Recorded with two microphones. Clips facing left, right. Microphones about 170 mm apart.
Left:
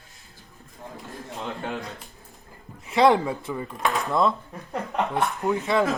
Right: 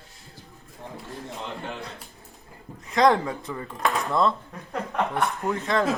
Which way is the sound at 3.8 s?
Centre (ahead or behind).